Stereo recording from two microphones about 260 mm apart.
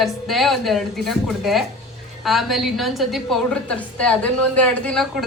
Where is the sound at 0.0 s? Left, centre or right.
Centre.